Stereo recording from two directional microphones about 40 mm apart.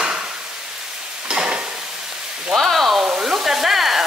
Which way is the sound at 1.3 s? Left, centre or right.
Right.